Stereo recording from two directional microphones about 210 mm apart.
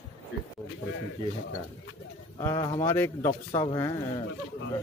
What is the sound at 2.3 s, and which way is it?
A man's voice, 15° left (ahead or behind).